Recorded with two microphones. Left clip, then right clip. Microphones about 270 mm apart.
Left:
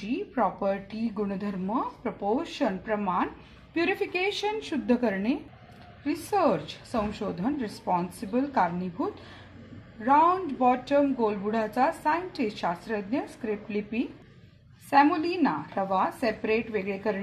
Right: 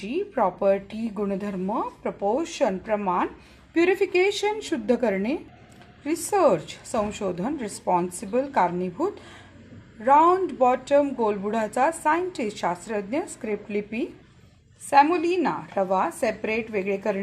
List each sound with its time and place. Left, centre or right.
0.3 s a woman's voice: right